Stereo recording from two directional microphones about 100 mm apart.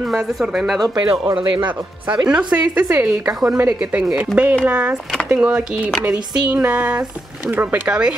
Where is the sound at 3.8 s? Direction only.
10° right (ahead or behind).